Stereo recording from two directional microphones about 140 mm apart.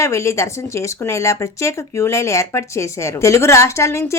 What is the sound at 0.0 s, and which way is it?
Speech, 20° left (ahead or behind).